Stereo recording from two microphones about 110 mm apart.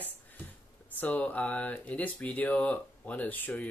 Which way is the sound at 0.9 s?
15° left (ahead or behind).